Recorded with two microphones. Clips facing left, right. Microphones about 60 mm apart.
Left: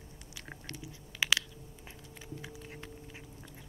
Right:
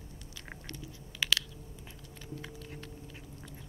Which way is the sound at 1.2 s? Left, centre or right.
Centre.